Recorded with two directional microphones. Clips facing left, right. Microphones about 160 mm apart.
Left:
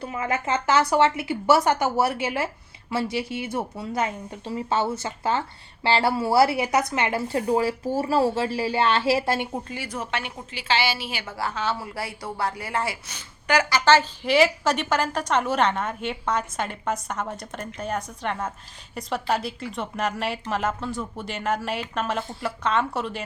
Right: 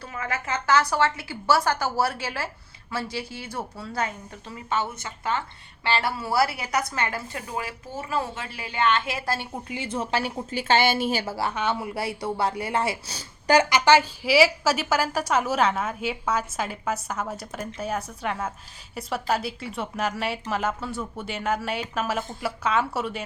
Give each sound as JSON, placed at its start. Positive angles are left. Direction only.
{"t": 0.0, "sound": "a woman's voice", "side_deg": 25}
{"t": 7.3, "sound": "speech", "side_deg": 35}
{"t": 9.6, "sound": "a woman's voice", "side_deg": -20}
{"t": 11.3, "sound": "speech", "side_deg": -20}
{"t": 13.7, "sound": "a woman's voice", "side_deg": -15}